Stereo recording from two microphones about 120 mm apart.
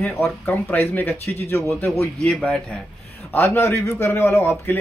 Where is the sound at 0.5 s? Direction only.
15° left (ahead or behind).